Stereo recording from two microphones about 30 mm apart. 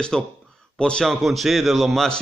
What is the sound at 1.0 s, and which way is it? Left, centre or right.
A man's voice, centre.